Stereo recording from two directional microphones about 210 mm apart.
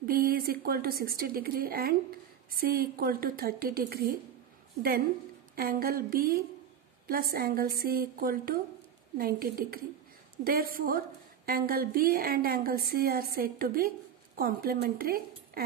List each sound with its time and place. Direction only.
0.0 s a woman's voice: 45° right (ahead or behind)
5.6 s a woman's voice: 45° right (ahead or behind)